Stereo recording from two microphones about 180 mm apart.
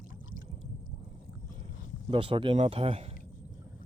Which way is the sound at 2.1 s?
30° right (ahead or behind).